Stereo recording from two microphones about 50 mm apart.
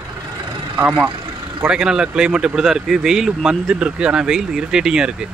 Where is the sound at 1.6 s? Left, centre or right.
Centre.